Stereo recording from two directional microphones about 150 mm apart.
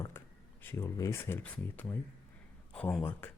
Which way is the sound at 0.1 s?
15° left (ahead or behind).